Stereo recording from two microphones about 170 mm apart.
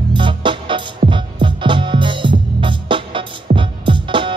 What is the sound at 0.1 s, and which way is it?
Music, 30° right (ahead or behind).